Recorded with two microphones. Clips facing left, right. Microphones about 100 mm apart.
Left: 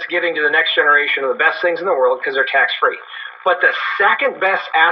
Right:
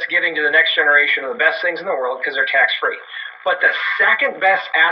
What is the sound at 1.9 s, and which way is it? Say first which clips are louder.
Speech: left 6 dB; 45° left (ahead or behind).